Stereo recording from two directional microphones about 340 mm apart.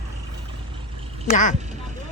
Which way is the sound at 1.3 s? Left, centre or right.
Left.